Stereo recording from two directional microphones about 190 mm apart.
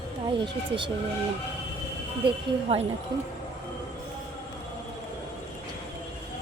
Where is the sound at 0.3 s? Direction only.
25° right (ahead or behind).